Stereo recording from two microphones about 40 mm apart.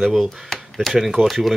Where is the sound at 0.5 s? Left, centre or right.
Centre.